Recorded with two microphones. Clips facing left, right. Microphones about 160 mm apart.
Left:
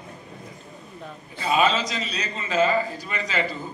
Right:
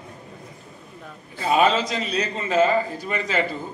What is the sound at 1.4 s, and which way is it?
A man's voice, 55° right (ahead or behind).